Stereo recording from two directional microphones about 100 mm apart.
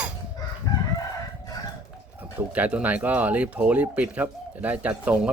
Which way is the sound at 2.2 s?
15° right (ahead or behind).